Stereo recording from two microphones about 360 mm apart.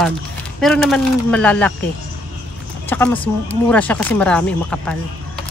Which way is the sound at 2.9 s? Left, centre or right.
Centre.